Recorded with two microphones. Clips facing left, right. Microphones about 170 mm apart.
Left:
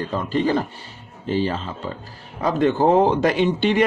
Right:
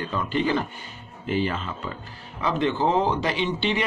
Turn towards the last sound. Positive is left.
turn(degrees=50)  # may be behind; listen again after turning